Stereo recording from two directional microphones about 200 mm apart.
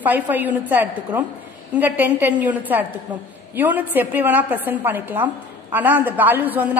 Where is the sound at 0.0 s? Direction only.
10° right (ahead or behind).